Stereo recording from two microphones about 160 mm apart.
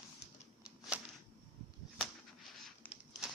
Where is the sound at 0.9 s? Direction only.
10° right (ahead or behind).